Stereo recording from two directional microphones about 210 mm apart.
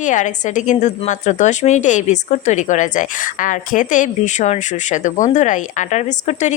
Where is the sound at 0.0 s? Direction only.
35° left (ahead or behind).